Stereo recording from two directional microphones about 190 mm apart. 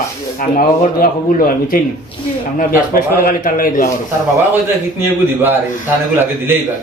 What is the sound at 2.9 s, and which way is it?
Speech, 50° left (ahead or behind).